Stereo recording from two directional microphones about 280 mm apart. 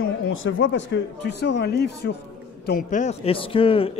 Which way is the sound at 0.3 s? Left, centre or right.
Left.